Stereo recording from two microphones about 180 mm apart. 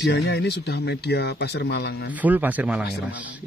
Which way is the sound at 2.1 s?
10° right (ahead or behind).